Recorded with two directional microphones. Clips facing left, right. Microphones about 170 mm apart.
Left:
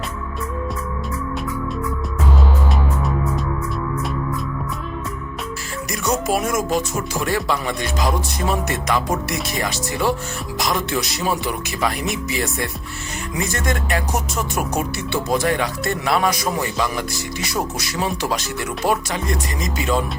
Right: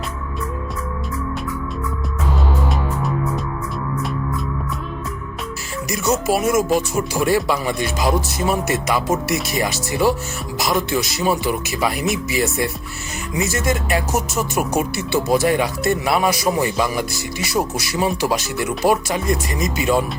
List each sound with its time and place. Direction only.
5.9 s speech: 5° right (ahead or behind)